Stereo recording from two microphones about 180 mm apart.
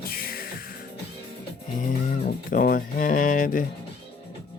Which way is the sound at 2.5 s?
50° left (ahead or behind).